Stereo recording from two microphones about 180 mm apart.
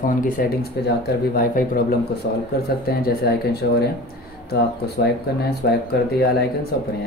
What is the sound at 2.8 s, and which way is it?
Speech, 60° left (ahead or behind).